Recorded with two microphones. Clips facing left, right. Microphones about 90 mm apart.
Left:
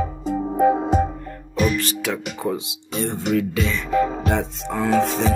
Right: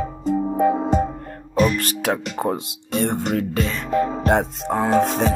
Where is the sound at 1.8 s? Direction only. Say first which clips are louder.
Right 2 dB; 50° right (ahead or behind).